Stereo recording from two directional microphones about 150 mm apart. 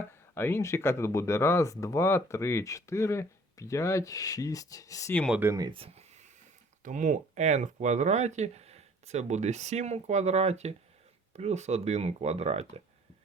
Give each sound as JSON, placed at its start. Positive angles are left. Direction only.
{"t": 0.3, "sound": "speech", "side_deg": 15}
{"t": 5.3, "sound": "speech", "side_deg": -15}
{"t": 5.6, "sound": "a sound", "side_deg": -40}
{"t": 6.8, "sound": "speech", "side_deg": -55}